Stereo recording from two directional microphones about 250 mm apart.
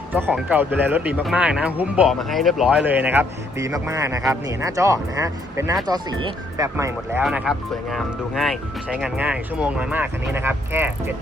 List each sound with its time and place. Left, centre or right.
0.1 s speech: centre